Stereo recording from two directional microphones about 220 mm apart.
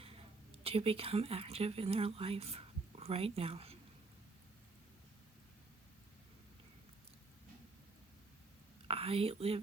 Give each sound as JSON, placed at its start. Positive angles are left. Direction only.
{"t": 0.0, "sound": "speech", "side_deg": -25}
{"t": 8.9, "sound": "speech", "side_deg": -25}